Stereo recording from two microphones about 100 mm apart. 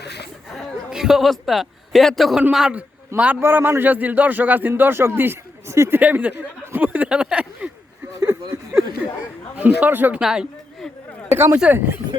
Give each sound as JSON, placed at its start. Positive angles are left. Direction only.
{"t": 0.9, "sound": "a man's voice", "side_deg": -5}
{"t": 3.2, "sound": "a man's voice", "side_deg": -15}
{"t": 6.0, "sound": "speech", "side_deg": -15}
{"t": 8.2, "sound": "a sound", "side_deg": -25}
{"t": 9.6, "sound": "speech", "side_deg": -15}
{"t": 10.8, "sound": "a sound", "side_deg": 5}
{"t": 11.3, "sound": "a man's voice", "side_deg": -25}